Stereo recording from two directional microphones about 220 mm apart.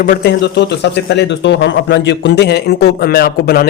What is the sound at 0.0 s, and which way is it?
Speech, 45° left (ahead or behind).